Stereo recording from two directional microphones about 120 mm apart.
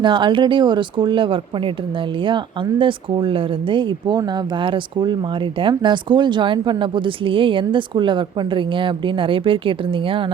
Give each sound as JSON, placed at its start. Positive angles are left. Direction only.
{"t": 0.0, "sound": "speech", "side_deg": -40}